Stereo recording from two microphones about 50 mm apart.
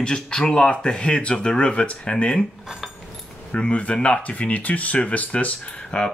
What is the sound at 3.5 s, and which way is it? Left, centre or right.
Speech, left.